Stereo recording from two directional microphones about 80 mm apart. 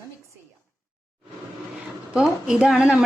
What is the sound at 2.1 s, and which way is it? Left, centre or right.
Speech, centre.